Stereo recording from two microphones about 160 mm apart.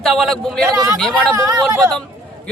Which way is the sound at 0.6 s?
20° right (ahead or behind).